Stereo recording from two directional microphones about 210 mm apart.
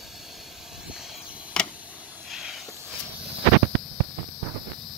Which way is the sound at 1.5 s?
5° left (ahead or behind).